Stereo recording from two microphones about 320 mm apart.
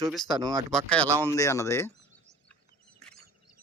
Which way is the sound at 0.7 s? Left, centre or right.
Centre.